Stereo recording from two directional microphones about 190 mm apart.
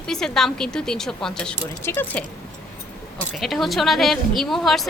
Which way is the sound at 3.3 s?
Centre (ahead or behind).